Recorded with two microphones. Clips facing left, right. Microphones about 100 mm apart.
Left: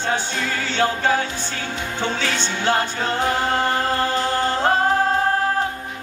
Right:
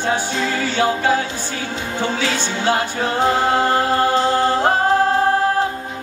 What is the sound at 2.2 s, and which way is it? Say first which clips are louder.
Music: right 2 dB; 10° right (ahead or behind).